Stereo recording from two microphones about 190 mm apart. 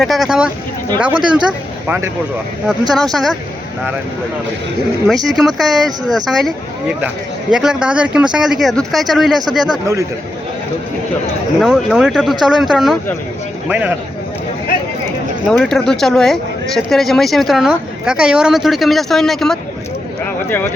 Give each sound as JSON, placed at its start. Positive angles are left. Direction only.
{"t": 0.0, "sound": "speech", "side_deg": 0}
{"t": 2.9, "sound": "speech", "side_deg": 0}
{"t": 5.0, "sound": "speech", "side_deg": 0}
{"t": 9.8, "sound": "speech", "side_deg": -15}
{"t": 11.6, "sound": "speech", "side_deg": -5}
{"t": 15.4, "sound": "speech", "side_deg": 0}